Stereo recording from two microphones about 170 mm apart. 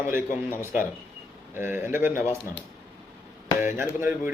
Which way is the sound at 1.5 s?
10° right (ahead or behind).